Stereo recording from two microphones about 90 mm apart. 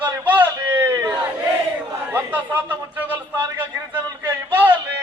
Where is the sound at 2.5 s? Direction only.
20° right (ahead or behind).